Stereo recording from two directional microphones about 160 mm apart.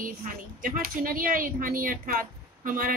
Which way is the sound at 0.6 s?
60° right (ahead or behind).